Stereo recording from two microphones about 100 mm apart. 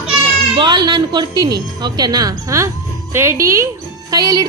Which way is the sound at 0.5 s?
50° right (ahead or behind).